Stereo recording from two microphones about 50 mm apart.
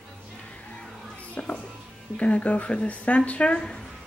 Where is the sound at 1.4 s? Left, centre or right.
Left.